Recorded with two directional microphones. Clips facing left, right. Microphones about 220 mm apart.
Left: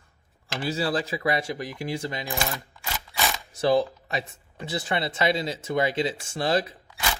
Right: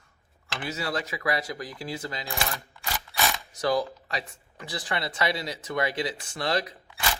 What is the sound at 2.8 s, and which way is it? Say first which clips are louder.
Mechanisms: right 1 dB; centre (ahead or behind).